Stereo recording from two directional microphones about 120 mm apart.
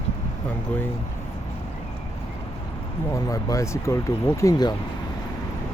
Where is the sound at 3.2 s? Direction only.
30° left (ahead or behind).